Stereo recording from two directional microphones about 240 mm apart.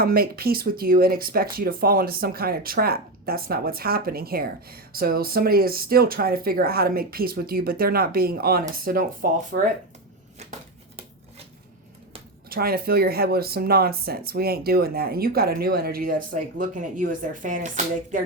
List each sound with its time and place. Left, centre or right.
0.0 s speech: right
12.5 s speech: right